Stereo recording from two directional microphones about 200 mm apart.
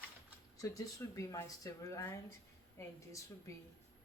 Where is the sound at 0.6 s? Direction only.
15° left (ahead or behind).